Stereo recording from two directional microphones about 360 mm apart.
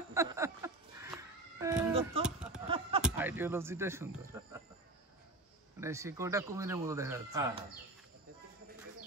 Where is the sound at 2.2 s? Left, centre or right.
Centre.